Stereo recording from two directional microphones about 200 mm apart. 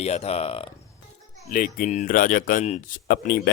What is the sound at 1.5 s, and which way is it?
Speech, 45° left (ahead or behind).